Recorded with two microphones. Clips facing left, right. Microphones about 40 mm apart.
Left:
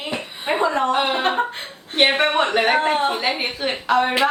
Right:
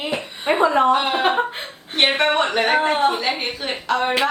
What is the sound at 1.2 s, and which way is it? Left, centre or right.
Speech, centre.